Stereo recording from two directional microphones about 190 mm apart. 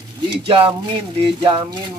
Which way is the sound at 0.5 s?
25° right (ahead or behind).